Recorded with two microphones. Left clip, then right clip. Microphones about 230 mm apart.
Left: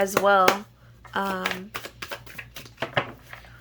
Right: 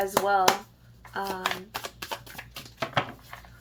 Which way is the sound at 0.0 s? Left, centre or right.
Left.